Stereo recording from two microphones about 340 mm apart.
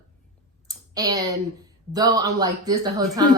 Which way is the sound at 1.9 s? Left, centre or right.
Centre.